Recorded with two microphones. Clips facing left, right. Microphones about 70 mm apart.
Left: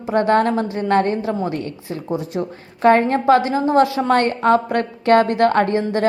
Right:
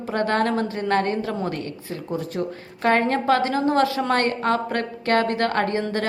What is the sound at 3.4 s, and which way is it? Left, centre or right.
Speech, right.